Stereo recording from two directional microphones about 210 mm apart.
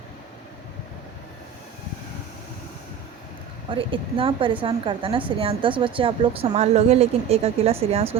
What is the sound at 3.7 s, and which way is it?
A woman's voice, 25° right (ahead or behind).